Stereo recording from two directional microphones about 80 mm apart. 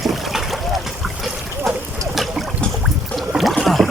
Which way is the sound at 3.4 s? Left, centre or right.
Centre.